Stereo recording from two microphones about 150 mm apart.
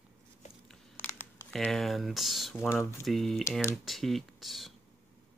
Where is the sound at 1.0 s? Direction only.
5° left (ahead or behind).